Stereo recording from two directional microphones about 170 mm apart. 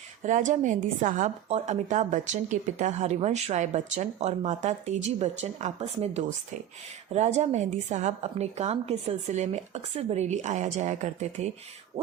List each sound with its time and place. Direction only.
0.2 s a woman's voice: 45° right (ahead or behind)